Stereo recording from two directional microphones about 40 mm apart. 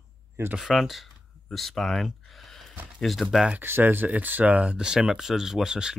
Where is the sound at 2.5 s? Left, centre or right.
Centre.